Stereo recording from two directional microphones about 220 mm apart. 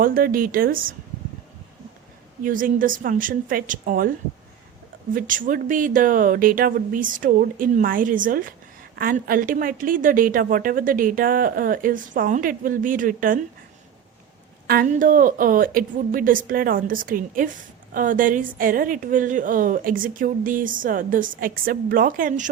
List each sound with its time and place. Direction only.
0.0 s a woman's voice: 40° right (ahead or behind)
2.4 s a woman's voice: 40° right (ahead or behind)
5.1 s a woman's voice: 40° right (ahead or behind)
14.7 s a woman's voice: 40° right (ahead or behind)